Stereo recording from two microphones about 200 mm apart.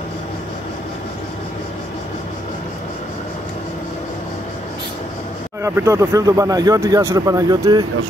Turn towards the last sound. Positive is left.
turn(degrees=-20)  # may be behind; listen again after turning